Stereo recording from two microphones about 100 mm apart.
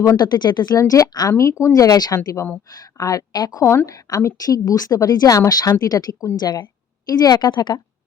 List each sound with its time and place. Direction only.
0.0 s a woman's voice: 40° left (ahead or behind)